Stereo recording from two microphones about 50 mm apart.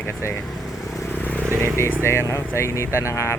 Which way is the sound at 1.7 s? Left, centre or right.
Left.